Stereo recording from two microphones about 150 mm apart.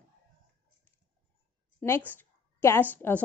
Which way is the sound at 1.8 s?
15° left (ahead or behind).